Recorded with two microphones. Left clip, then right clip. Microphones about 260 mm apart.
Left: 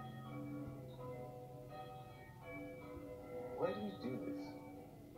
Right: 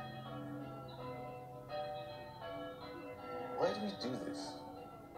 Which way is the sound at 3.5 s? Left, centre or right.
Right.